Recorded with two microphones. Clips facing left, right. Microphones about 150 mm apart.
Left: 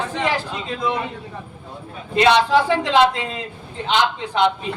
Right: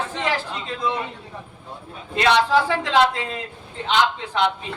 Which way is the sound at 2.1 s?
20° left (ahead or behind).